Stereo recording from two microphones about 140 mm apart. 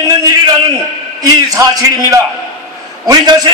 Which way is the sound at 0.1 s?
25° right (ahead or behind).